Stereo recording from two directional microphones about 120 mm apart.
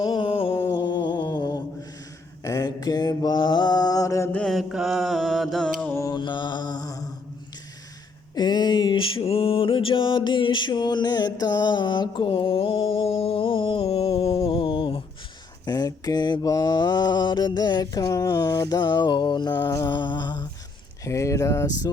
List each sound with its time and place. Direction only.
0.0 s a sound: 40° left (ahead or behind)
0.6 s a sound: 35° left (ahead or behind)
2.4 s mantra: 30° left (ahead or behind)
4.3 s mantra: 5° left (ahead or behind)
5.9 s mantra: 25° left (ahead or behind)
6.1 s mantra: 40° left (ahead or behind)
8.4 s music: 35° left (ahead or behind)
15.6 s mantra: 35° left (ahead or behind)
21.0 s speech: 25° left (ahead or behind)